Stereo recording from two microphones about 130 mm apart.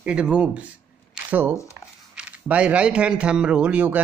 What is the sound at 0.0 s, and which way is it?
A man's voice, 10° right (ahead or behind).